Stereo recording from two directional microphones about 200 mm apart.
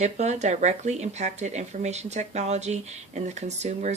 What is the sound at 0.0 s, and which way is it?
Speech, 35° right (ahead or behind).